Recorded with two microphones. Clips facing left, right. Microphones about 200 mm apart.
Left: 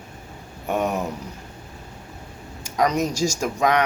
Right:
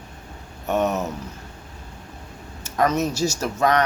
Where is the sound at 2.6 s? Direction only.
15° left (ahead or behind).